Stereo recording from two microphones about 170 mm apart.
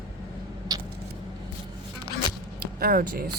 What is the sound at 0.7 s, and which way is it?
Vehicle, 20° right (ahead or behind).